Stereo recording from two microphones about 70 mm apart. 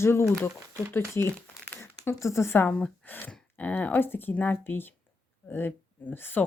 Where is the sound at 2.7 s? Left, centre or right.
Left.